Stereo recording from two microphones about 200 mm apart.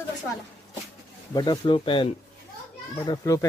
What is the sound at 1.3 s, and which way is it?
Speech, 20° left (ahead or behind).